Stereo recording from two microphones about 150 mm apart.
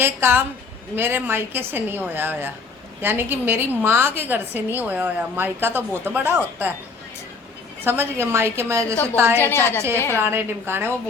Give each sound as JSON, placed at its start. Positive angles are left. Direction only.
{"t": 0.0, "sound": "a woman's voice", "side_deg": -15}
{"t": 7.9, "sound": "a woman's voice", "side_deg": -15}
{"t": 9.4, "sound": "a woman's voice", "side_deg": 15}
{"t": 10.2, "sound": "a woman's voice", "side_deg": -15}